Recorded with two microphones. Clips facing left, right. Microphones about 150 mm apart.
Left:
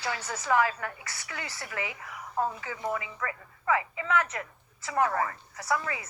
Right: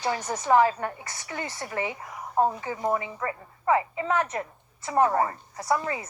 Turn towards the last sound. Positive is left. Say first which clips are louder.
# right 4 dB
turn(degrees=-35)  # may be behind; listen again after turning